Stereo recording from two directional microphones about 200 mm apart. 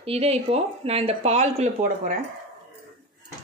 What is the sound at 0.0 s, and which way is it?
Speech, 30° right (ahead or behind).